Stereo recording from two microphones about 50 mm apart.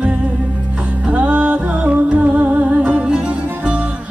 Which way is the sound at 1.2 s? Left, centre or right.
Right.